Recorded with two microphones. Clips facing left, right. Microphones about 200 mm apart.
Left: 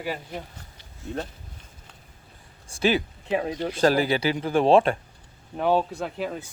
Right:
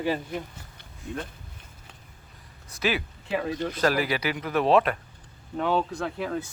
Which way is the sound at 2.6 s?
30° left (ahead or behind).